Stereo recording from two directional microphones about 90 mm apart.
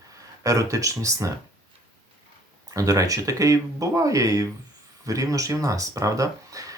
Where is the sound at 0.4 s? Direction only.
40° right (ahead or behind).